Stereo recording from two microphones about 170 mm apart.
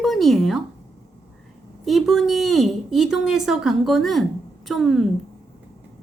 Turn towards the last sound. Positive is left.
turn(degrees=0)  # may be behind; listen again after turning